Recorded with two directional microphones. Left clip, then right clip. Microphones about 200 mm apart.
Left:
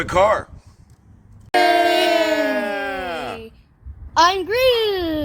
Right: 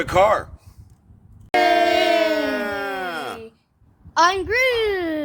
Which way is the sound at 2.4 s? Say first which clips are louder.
Left 3 dB; 45° right (ahead or behind).